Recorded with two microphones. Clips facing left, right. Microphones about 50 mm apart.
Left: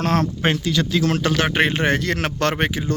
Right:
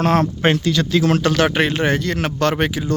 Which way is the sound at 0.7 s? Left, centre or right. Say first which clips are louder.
Right 3 dB; right.